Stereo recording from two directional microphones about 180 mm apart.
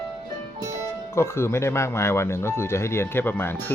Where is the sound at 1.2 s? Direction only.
15° left (ahead or behind).